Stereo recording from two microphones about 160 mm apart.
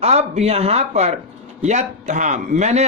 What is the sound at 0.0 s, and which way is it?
A man's voice, 40° right (ahead or behind).